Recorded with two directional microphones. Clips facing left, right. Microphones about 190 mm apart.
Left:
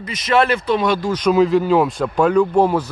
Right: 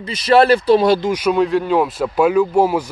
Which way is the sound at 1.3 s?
Centre (ahead or behind).